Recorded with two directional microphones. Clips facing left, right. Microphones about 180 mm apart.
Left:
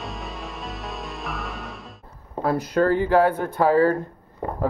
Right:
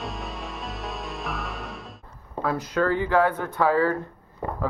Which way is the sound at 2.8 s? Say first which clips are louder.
Left 3 dB; 40° left (ahead or behind).